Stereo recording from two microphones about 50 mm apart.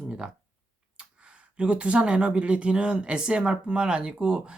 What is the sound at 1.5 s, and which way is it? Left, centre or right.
Speech, right.